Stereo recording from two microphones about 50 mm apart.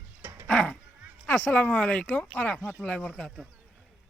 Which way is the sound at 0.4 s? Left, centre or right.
Left.